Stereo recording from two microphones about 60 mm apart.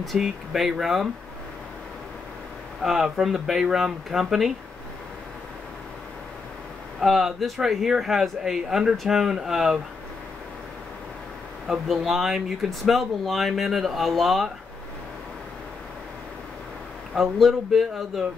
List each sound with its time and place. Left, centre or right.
0.2 s speech: centre
2.8 s speech: centre
7.0 s speech: centre
11.9 s speech: centre
17.1 s speech: centre